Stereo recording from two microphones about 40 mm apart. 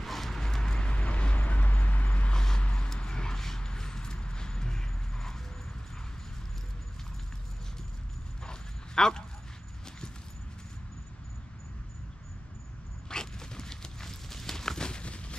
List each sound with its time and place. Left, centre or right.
0.0 s dog: centre
0.8 s vehicle: left
2.3 s vehicle: centre
2.6 s vehicle: left
2.9 s horse: centre
8.5 s dog: centre
13.1 s a sound: centre